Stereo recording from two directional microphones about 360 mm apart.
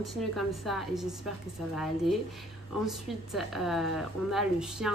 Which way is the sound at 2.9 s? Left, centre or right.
Centre.